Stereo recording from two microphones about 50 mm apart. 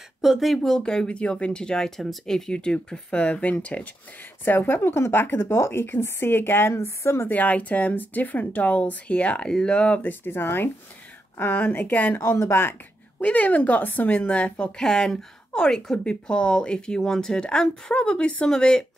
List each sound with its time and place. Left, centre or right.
0.2 s speech: centre
0.8 s speech: left
4.5 s speech: left
6.7 s speech: left
7.2 s speech: left
10.0 s a woman's voice: left
11.6 s speech: left
13.2 s speech: left
14.8 s speech: centre